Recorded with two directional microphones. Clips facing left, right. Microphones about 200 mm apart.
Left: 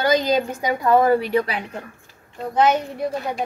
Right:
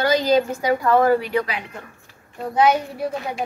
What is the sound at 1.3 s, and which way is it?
Speech, 30° left (ahead or behind).